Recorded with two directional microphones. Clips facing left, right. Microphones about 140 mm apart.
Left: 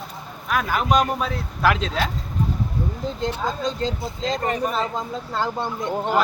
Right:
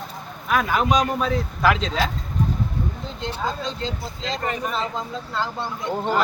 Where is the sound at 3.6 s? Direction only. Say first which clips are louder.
Left 4 dB; 45° left (ahead or behind).